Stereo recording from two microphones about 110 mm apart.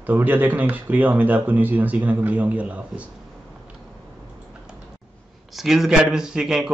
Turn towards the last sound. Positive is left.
turn(degrees=-5)  # may be behind; listen again after turning